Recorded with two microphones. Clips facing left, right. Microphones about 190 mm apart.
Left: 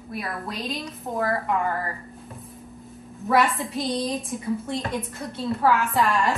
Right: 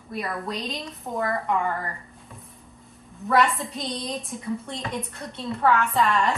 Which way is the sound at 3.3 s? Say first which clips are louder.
Left 1 dB; centre (ahead or behind).